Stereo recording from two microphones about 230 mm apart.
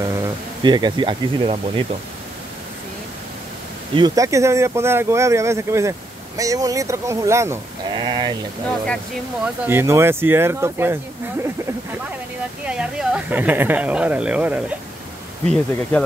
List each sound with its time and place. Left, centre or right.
0.0 s speech: centre
3.9 s speech: centre
8.6 s speech: centre
9.7 s speech: centre
12.6 s speech: centre